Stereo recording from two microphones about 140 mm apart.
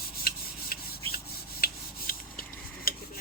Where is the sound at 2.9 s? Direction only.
90° left.